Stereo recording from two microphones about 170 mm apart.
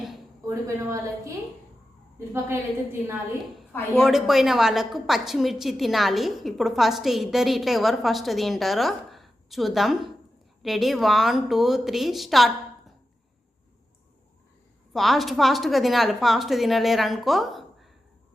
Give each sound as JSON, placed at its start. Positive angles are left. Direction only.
{"t": 0.4, "sound": "a woman's voice", "side_deg": -15}
{"t": 3.7, "sound": "speech", "side_deg": 10}
{"t": 4.0, "sound": "a woman's voice", "side_deg": 0}
{"t": 14.9, "sound": "a woman's voice", "side_deg": 0}